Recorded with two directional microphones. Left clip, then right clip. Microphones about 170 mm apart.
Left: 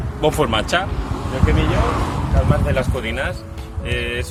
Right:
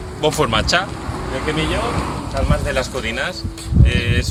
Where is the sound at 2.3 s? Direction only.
15° left (ahead or behind).